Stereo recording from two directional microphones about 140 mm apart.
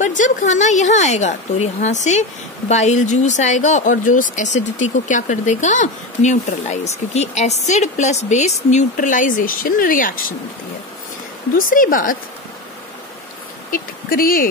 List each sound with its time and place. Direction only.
0.0 s speech: 65° left (ahead or behind)
11.5 s a woman's voice: 80° left
13.7 s speech: 85° left